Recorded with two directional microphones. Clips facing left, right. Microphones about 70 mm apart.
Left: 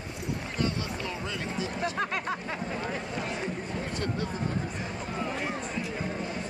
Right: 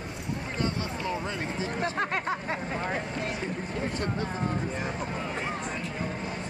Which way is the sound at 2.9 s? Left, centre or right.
Right.